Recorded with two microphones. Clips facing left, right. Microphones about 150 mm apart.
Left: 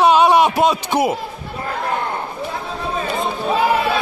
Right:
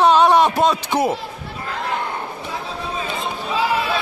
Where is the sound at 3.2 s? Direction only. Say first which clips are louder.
Left 5 dB; 55° left (ahead or behind).